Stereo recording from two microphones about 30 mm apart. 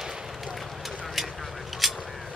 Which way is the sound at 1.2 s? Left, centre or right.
Centre.